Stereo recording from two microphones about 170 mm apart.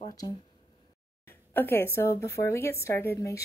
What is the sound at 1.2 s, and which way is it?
A woman's voice, 15° left (ahead or behind).